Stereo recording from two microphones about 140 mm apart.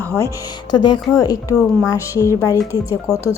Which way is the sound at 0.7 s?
30° left (ahead or behind).